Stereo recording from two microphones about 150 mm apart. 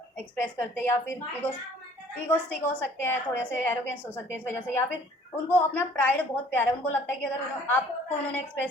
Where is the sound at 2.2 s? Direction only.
10° left (ahead or behind).